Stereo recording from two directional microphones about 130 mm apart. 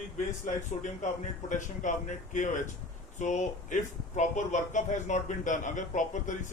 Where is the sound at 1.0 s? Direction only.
75° left (ahead or behind).